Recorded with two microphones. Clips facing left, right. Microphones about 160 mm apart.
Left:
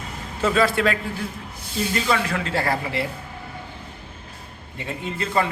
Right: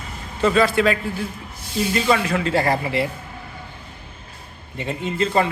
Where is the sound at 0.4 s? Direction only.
Centre (ahead or behind).